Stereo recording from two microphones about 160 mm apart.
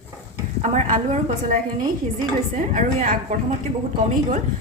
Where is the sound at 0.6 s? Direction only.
45° right (ahead or behind).